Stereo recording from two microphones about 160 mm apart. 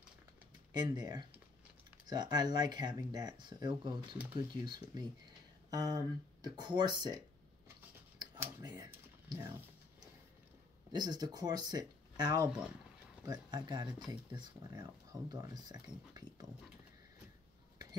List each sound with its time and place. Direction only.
0.7 s speech: 25° right (ahead or behind)
8.2 s a sound: 15° right (ahead or behind)
10.9 s speech: 25° right (ahead or behind)